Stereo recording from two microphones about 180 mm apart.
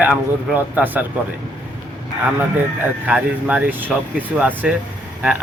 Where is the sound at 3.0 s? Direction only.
10° right (ahead or behind).